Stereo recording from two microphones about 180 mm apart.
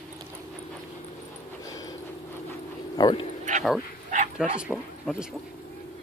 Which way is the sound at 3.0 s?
25° left (ahead or behind).